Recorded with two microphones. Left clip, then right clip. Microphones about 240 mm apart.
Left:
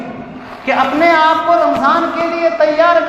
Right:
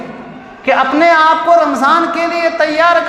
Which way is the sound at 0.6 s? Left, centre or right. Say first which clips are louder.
Right 2 dB; right.